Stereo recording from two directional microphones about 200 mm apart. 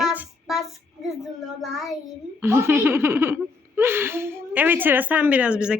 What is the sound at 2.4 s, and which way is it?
Speech, 15° right (ahead or behind).